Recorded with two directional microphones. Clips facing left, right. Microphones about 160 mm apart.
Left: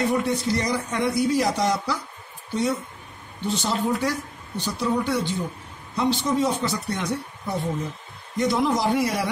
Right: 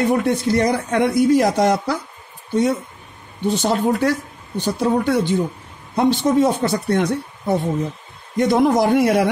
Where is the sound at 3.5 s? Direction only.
55° right (ahead or behind).